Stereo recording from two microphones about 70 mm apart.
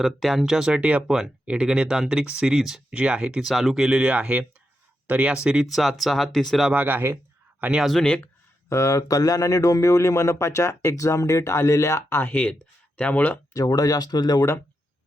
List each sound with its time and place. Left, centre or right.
0.0 s speech: centre
3.4 s speech: centre
3.9 s speech: centre
5.7 s speech: centre
6.7 s speech: right
7.6 s speech: centre
8.0 s speech: centre
8.7 s speech: left
13.5 s speech: left